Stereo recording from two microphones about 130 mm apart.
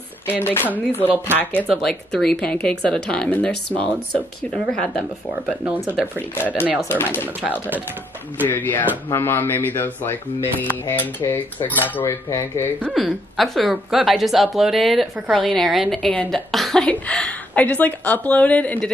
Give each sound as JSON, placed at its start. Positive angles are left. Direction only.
{"t": 0.3, "sound": "a woman's voice", "side_deg": 15}
{"t": 1.0, "sound": "speech", "side_deg": -15}
{"t": 1.7, "sound": "a woman's voice", "side_deg": 5}
{"t": 6.1, "sound": "a woman's voice", "side_deg": 15}
{"t": 7.4, "sound": "speech", "side_deg": -10}
{"t": 8.5, "sound": "a woman's voice", "side_deg": 15}
{"t": 12.9, "sound": "a woman's voice", "side_deg": 0}